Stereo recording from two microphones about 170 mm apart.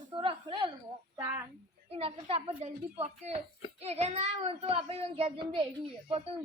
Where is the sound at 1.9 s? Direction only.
35° right (ahead or behind).